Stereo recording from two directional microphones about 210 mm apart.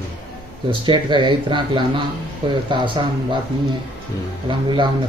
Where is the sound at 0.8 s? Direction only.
20° right (ahead or behind).